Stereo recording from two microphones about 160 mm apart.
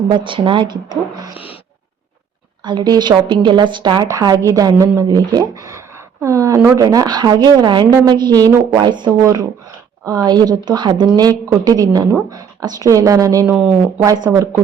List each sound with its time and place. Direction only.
0.1 s a woman's voice: 30° right (ahead or behind)
2.6 s a woman's voice: 25° right (ahead or behind)
13.5 s speech: 10° right (ahead or behind)
14.0 s a woman's voice: 20° right (ahead or behind)